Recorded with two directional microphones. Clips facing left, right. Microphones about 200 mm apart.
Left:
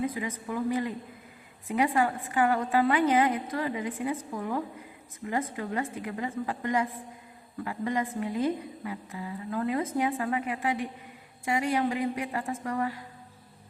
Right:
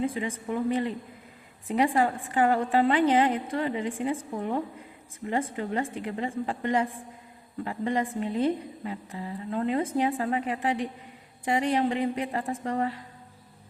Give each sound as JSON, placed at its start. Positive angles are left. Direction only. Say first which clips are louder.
{"t": 0.0, "sound": "a woman's voice", "louder": "right 2 dB", "side_deg": -30}